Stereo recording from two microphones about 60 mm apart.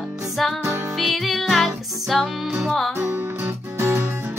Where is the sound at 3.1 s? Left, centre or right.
Right.